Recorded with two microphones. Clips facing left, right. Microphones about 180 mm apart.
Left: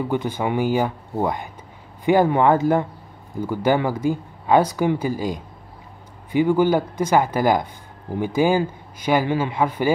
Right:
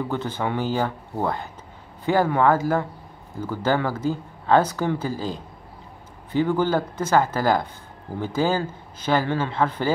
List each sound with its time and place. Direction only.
0.1 s speech: 15° left (ahead or behind)